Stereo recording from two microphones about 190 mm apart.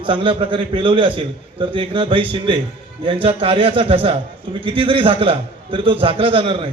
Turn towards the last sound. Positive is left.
turn(degrees=-30)  # may be behind; listen again after turning